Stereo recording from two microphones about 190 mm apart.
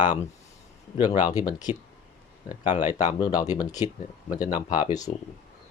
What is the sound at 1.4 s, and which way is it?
Speech, 20° left (ahead or behind).